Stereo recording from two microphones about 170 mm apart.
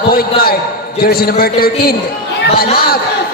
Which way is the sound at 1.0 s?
65° left (ahead or behind).